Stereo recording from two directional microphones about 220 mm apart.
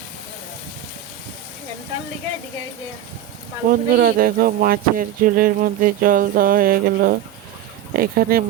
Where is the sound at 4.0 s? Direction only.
40° right (ahead or behind).